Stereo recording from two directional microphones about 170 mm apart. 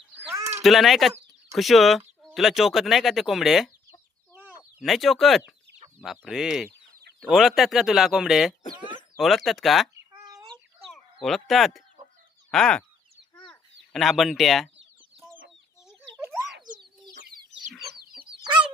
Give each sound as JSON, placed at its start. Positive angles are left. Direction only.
{"t": 0.6, "sound": "speech", "side_deg": 0}
{"t": 4.4, "sound": "chicken", "side_deg": -5}
{"t": 6.0, "sound": "speech", "side_deg": 0}
{"t": 10.1, "sound": "a sound", "side_deg": -20}
{"t": 11.2, "sound": "speech", "side_deg": 0}
{"t": 16.7, "sound": "chicken", "side_deg": -50}
{"t": 18.0, "sound": "chicken", "side_deg": -60}